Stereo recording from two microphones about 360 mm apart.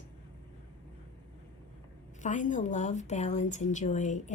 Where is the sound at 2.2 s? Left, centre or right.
Left.